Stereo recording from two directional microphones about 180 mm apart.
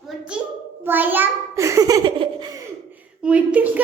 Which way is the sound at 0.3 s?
5° right (ahead or behind).